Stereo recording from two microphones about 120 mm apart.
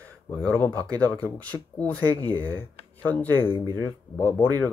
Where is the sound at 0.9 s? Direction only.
15° left (ahead or behind).